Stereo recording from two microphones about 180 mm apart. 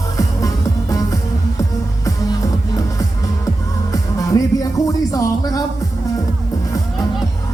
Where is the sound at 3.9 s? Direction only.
20° left (ahead or behind).